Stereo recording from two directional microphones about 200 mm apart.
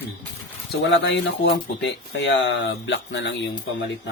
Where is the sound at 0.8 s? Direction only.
65° left (ahead or behind).